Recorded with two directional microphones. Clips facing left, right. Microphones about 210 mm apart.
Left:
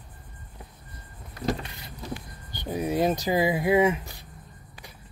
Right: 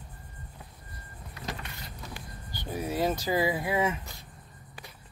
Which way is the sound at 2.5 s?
20° left (ahead or behind).